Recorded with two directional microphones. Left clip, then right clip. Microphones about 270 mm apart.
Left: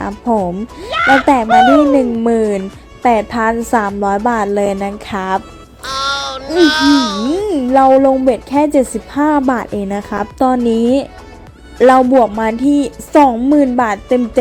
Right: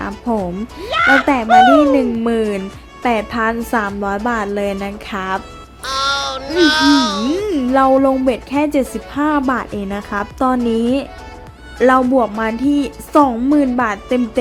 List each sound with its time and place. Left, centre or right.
0.1 s speech: centre
2.0 s speech: centre
5.8 s speech: centre
8.3 s speech: centre